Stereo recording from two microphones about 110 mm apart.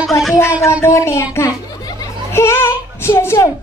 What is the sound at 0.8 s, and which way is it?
Child singing, 25° left (ahead or behind).